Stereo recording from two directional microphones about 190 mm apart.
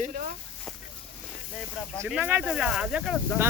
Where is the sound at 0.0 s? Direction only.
45° right (ahead or behind).